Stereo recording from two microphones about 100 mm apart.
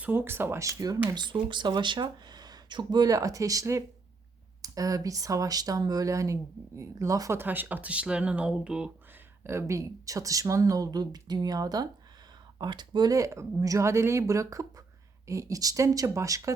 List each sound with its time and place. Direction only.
0.0 s speech: 20° right (ahead or behind)
1.1 s speech: 50° right (ahead or behind); by 7.4 s 30° right (ahead or behind)
7.4 s speech: 20° right (ahead or behind)
9.4 s speech: 30° right (ahead or behind); by 13.1 s 45° right (ahead or behind)
13.1 s speech: 30° right (ahead or behind)